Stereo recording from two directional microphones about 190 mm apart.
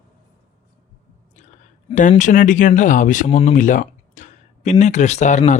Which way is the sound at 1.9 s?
45° left (ahead or behind).